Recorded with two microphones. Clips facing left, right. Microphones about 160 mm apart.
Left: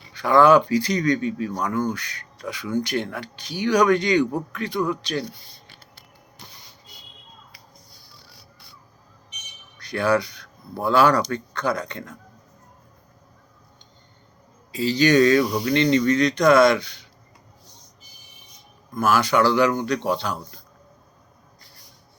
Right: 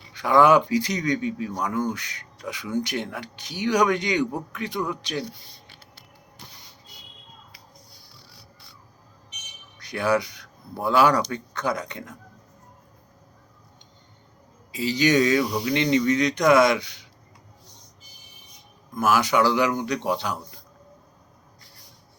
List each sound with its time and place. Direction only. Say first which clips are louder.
0.1 s speech: left 2 dB; 15° right (ahead or behind)
5.6 s a sound: even; 45° left (ahead or behind)
9.7 s speech: left 2 dB; 15° right (ahead or behind)
14.7 s speech: left 3 dB; 15° right (ahead or behind)
18.9 s speech: left 1 dB; 15° right (ahead or behind)